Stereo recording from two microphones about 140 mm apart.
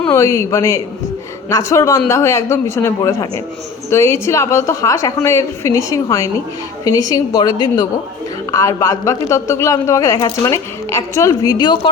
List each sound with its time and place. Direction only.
0.1 s a woman's voice: 20° left (ahead or behind)